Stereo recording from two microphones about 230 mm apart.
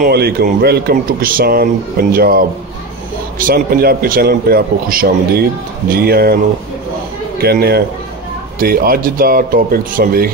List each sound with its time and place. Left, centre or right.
0.0 s a man's voice: right